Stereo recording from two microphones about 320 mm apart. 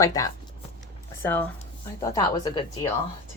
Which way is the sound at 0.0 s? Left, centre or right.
Centre.